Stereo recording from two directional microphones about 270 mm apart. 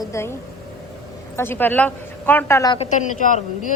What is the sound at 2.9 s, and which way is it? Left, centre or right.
Speech, left.